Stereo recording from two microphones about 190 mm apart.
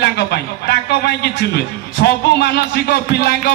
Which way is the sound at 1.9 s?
60° left (ahead or behind).